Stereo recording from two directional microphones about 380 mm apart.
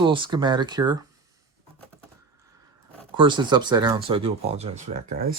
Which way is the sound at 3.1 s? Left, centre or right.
Centre.